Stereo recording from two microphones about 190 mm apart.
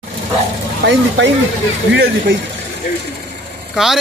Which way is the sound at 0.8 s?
65° right (ahead or behind).